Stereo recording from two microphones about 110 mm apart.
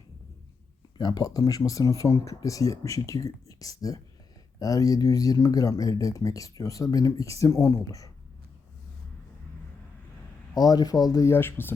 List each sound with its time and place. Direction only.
0.9 s speech: 40° left (ahead or behind)
10.5 s speech: 35° left (ahead or behind)
11.3 s speech: 20° left (ahead or behind)